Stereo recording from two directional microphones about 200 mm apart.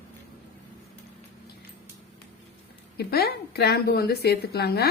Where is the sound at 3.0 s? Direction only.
50° left (ahead or behind).